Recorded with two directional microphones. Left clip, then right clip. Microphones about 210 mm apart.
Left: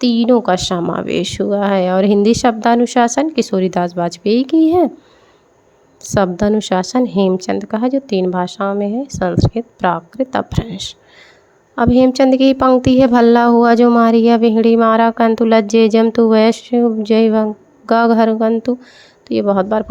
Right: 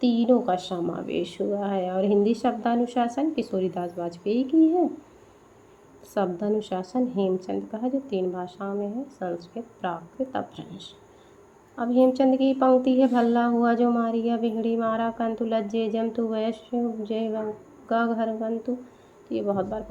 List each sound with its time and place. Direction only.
0.0 s speech: 40° left (ahead or behind)
6.0 s speech: 40° left (ahead or behind)